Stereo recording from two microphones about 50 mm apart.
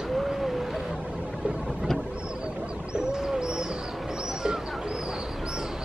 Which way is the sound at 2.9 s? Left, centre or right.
Centre.